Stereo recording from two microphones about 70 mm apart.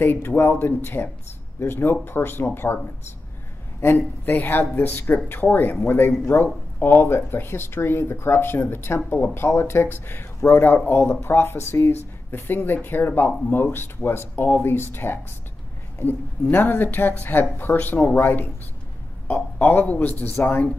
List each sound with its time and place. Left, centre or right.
0.0 s speech: left
3.8 s a woman's voice: left